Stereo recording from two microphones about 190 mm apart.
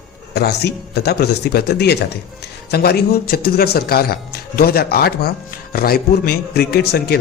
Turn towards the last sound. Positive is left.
turn(degrees=55)  # may be behind; listen again after turning